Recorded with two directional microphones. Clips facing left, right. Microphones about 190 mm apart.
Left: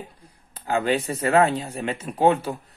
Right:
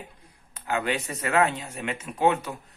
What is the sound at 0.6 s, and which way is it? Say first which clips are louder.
Speech: left 5 dB; 30° left (ahead or behind).